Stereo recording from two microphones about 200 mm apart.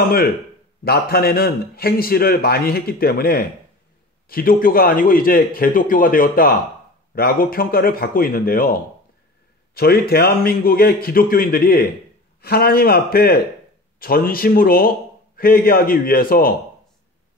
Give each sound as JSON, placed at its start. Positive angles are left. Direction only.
{"t": 0.8, "sound": "a man's voice", "side_deg": 50}
{"t": 9.8, "sound": "a man's voice", "side_deg": 50}